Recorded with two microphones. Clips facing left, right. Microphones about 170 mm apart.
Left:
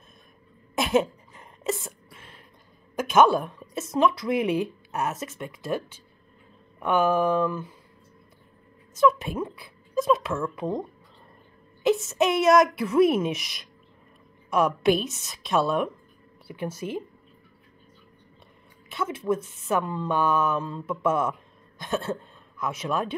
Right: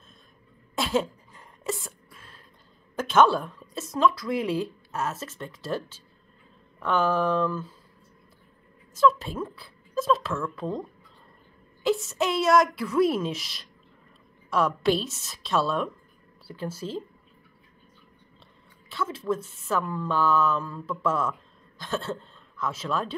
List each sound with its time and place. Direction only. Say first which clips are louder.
0.7 s a sound: left 3 dB; 20° left (ahead or behind)
3.0 s speech: left 1 dB; 15° left (ahead or behind)
8.9 s speech: left 1 dB; 20° left (ahead or behind)
18.9 s speech: left 2 dB; 20° left (ahead or behind)